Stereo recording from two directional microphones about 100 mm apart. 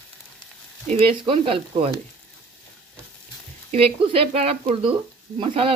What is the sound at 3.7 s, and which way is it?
Speech, 80° right.